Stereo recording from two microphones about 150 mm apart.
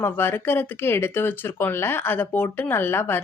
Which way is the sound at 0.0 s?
15° left (ahead or behind).